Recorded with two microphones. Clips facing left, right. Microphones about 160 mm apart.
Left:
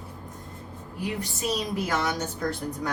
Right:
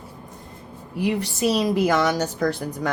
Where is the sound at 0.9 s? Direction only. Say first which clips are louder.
Right 8 dB; 90° right.